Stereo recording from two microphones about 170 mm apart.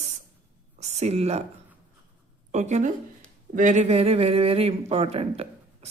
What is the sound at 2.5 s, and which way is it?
Speech, 40° right (ahead or behind).